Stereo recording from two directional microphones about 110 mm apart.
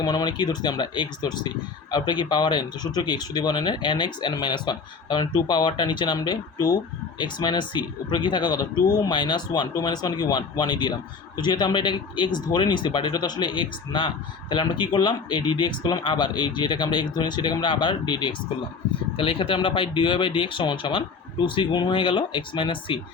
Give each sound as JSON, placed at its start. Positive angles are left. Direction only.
{"t": 0.0, "sound": "speech", "side_deg": 40}